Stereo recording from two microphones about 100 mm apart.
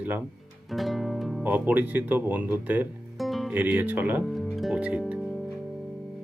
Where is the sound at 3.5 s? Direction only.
15° right (ahead or behind).